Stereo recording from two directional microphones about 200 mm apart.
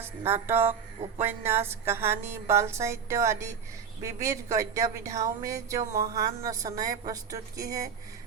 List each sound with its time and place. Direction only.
0.0 s music: 10° right (ahead or behind)
1.2 s a woman's voice: 10° right (ahead or behind)